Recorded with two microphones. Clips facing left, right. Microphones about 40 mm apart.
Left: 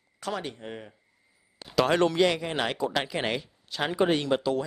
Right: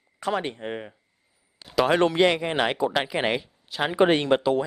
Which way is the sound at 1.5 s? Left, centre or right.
Centre.